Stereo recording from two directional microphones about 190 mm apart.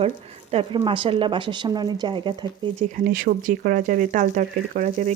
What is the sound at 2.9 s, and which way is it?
Speech, 50° right (ahead or behind).